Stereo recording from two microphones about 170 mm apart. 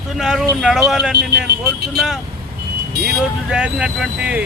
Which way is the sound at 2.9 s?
70° right (ahead or behind).